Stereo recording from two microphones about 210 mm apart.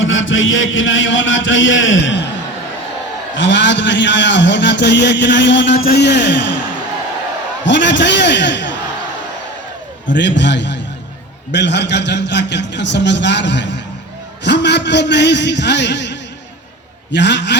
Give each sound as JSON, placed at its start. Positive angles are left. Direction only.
{"t": 0.0, "sound": "a man's voice", "side_deg": 65}
{"t": 3.3, "sound": "a man's voice", "side_deg": 60}
{"t": 5.7, "sound": "a man's voice", "side_deg": 45}
{"t": 7.6, "sound": "a man's voice", "side_deg": 60}
{"t": 10.2, "sound": "a man's voice", "side_deg": 55}